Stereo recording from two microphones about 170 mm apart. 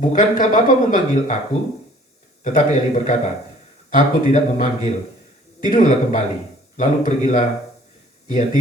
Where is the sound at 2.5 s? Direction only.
45° left (ahead or behind).